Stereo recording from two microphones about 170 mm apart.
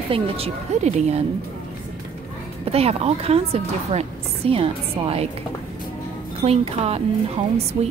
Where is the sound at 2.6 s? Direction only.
35° right (ahead or behind).